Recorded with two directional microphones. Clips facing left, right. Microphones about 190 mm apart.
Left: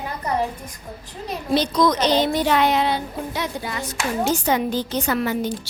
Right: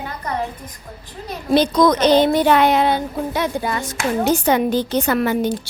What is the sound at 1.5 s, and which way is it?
A woman's voice, 55° right (ahead or behind).